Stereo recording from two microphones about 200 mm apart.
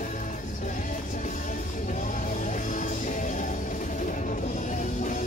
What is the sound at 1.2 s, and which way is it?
Music, 40° left (ahead or behind).